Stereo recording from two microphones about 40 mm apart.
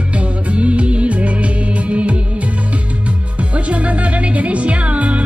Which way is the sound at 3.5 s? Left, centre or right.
Right.